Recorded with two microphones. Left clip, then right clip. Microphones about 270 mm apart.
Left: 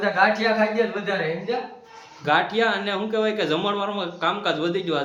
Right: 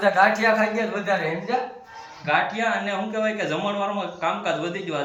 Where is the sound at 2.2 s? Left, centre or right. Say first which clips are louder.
Left 2 dB; centre.